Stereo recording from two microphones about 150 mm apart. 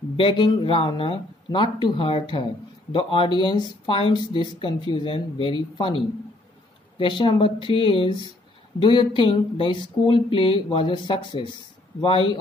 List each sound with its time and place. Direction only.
0.2 s speech: 30° left (ahead or behind)
12.0 s speech: 35° left (ahead or behind)